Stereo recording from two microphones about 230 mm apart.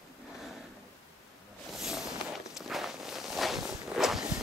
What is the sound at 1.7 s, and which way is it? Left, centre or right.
Walk, centre.